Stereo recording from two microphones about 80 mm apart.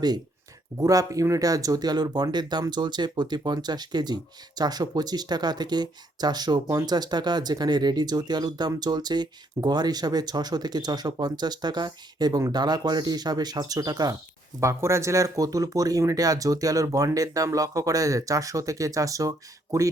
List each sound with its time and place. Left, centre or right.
0.8 s speech: right
14.6 s speech: right